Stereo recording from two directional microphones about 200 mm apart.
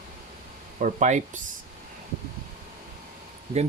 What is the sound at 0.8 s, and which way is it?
Speech, 35° right (ahead or behind).